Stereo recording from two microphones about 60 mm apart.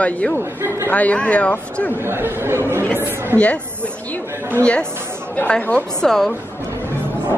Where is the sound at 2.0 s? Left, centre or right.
Right.